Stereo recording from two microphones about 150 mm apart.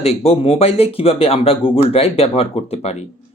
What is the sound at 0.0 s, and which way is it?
Speech, 45° left (ahead or behind).